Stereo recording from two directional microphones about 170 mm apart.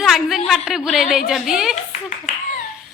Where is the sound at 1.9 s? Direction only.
45° left (ahead or behind).